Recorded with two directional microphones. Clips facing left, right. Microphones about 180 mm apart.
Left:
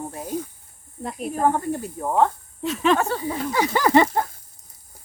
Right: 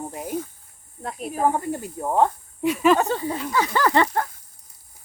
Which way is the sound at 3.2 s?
15° left (ahead or behind).